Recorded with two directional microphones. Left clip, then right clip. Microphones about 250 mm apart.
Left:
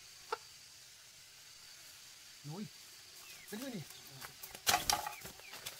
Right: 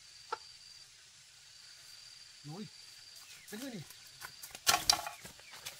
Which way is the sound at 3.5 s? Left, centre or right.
Centre.